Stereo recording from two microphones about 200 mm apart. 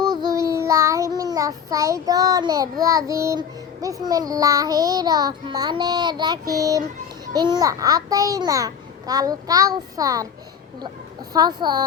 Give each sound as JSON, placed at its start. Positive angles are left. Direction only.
{"t": 0.1, "sound": "child singing", "side_deg": -15}
{"t": 7.3, "sound": "a child's voice", "side_deg": -20}
{"t": 11.3, "sound": "speech", "side_deg": -20}